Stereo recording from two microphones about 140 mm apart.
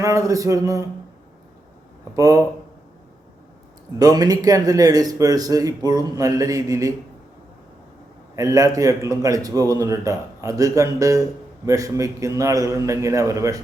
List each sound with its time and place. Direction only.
0.0 s speech: 20° right (ahead or behind)
2.1 s speech: 25° right (ahead or behind)
3.9 s speech: 25° right (ahead or behind)
8.4 s speech: 25° right (ahead or behind)